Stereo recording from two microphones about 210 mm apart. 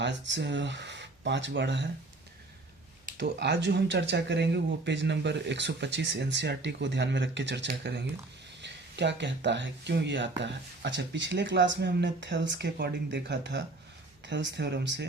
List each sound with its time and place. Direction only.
0.0 s speech: 55° right (ahead or behind)
3.2 s speech: 55° right (ahead or behind)